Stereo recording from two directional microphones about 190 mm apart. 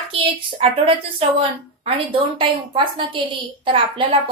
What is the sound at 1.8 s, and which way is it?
A woman's voice, 30° right (ahead or behind).